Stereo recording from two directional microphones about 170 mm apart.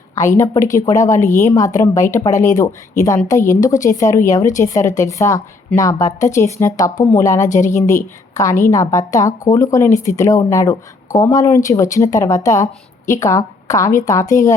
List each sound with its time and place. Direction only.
0.2 s a woman's voice: 15° left (ahead or behind)